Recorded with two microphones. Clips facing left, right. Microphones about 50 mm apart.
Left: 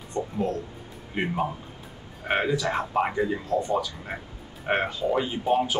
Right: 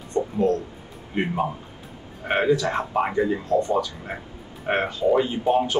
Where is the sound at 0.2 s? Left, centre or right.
Centre.